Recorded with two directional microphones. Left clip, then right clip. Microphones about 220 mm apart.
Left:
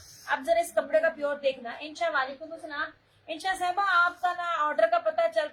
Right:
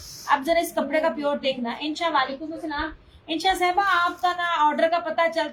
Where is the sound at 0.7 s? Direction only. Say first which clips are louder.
Right 2 dB; 25° left (ahead or behind).